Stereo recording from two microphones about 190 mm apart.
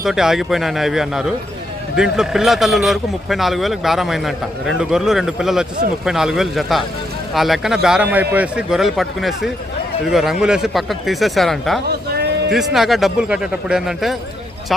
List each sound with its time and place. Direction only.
0.0 s speech: centre (ahead or behind)
11.9 s a sound: 55° right (ahead or behind)
12.5 s speech: centre (ahead or behind)